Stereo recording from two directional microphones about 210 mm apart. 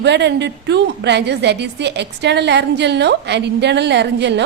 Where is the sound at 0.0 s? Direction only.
55° right (ahead or behind).